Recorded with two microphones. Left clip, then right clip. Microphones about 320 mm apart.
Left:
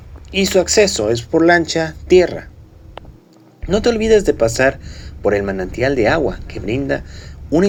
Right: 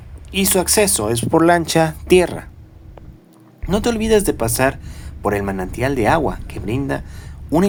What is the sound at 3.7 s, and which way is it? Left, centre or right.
Speech, centre.